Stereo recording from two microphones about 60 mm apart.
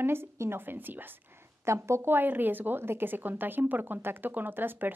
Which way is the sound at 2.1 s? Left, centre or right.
Right.